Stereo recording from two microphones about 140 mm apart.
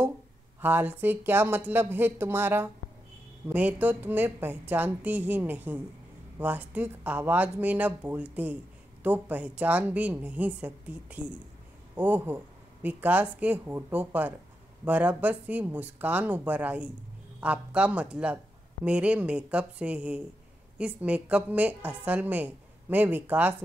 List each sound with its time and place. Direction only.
0.6 s a woman's voice: 15° right (ahead or behind)